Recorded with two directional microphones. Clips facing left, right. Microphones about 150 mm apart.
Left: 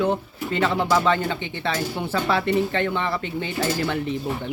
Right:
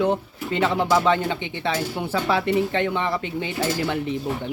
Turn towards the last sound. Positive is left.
turn(degrees=-15)  # may be behind; listen again after turning